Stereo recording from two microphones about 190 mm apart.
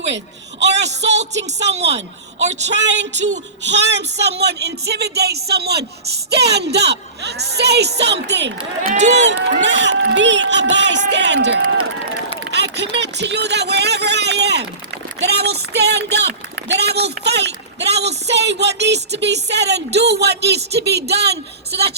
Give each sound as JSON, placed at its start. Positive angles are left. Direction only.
{"t": 0.6, "sound": "a sound", "side_deg": -65}
{"t": 1.1, "sound": "speech", "side_deg": -35}
{"t": 1.8, "sound": "a woman's voice", "side_deg": -65}
{"t": 8.5, "sound": "speech", "side_deg": -35}
{"t": 9.6, "sound": "speech", "side_deg": -70}
{"t": 12.5, "sound": "a sound", "side_deg": -65}
{"t": 15.3, "sound": "a woman's voice", "side_deg": -60}